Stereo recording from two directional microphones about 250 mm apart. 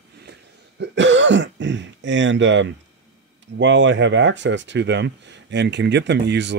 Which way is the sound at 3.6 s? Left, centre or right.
Right.